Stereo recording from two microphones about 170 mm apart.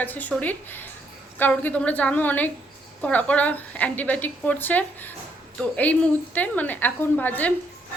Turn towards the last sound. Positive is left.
turn(degrees=10)  # may be behind; listen again after turning